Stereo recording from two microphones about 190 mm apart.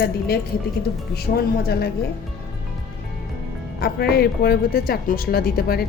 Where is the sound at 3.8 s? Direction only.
55° left (ahead or behind).